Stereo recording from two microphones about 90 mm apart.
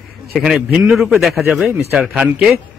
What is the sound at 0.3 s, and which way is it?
A man's voice, centre (ahead or behind).